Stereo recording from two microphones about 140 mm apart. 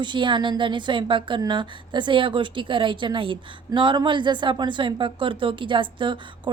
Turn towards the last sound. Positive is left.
turn(degrees=-35)  # may be behind; listen again after turning